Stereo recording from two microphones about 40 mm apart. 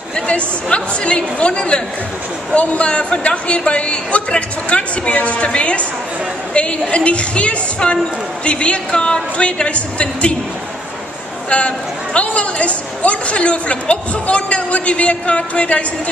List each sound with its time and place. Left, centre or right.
0.1 s a woman's voice: left
11.4 s a woman's voice: left